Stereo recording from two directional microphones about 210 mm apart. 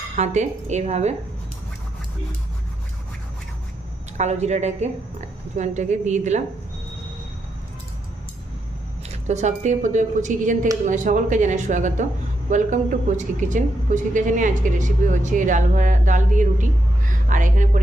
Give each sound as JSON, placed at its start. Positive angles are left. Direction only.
{"t": 0.2, "sound": "a woman's voice", "side_deg": -35}
{"t": 4.2, "sound": "a woman's voice", "side_deg": -35}
{"t": 9.0, "sound": "a woman's voice", "side_deg": -35}
{"t": 17.1, "sound": "a sound", "side_deg": -40}